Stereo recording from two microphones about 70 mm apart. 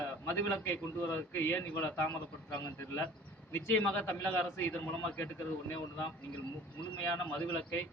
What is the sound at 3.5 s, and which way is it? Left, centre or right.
A man's voice, left.